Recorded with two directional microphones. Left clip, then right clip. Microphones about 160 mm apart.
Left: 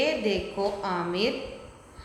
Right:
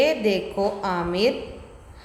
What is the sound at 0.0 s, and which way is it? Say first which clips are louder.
A woman's voice: right 5 dB; 35° right (ahead or behind).